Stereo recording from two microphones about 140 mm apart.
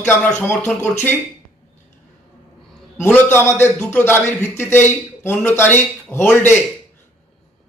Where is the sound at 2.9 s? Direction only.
15° left (ahead or behind).